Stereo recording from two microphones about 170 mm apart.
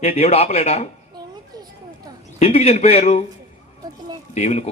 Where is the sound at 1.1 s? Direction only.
25° right (ahead or behind).